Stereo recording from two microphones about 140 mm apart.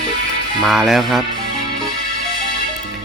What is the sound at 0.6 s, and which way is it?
Speech, centre (ahead or behind).